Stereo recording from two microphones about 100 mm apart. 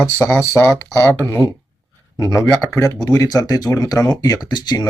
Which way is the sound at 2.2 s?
30° left (ahead or behind).